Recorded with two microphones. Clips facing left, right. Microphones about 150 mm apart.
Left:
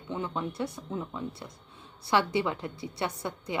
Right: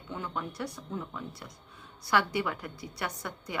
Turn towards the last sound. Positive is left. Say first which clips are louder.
# left 4 dB
turn(degrees=25)  # may be behind; listen again after turning